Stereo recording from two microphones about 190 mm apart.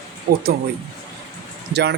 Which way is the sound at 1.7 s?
60° right (ahead or behind).